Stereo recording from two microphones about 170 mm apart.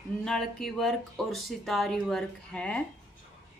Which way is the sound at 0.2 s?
5° left (ahead or behind).